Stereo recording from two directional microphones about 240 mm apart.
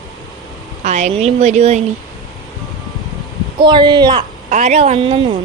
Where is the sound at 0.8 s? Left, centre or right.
Right.